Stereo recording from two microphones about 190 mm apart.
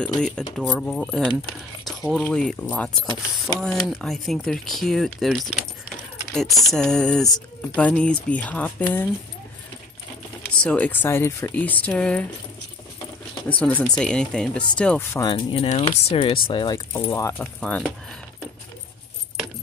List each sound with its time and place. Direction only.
0.0 s speech: 5° left (ahead or behind)
10.6 s speech: 5° left (ahead or behind)
13.6 s speech: 10° left (ahead or behind)
15.2 s speech: 30° left (ahead or behind); by 17.9 s 5° left (ahead or behind)